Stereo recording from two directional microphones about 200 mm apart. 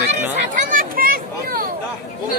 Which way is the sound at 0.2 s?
40° right (ahead or behind).